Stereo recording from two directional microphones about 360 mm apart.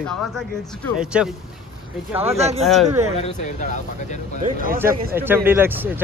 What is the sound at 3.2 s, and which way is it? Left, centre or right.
Speech, centre.